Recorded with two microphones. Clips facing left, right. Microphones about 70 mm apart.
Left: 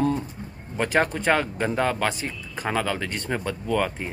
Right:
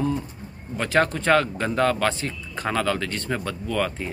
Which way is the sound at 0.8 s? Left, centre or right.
Left.